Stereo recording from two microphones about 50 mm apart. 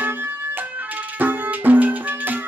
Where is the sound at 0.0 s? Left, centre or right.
Right.